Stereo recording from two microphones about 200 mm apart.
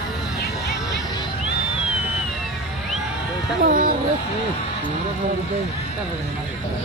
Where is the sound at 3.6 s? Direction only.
45° right (ahead or behind).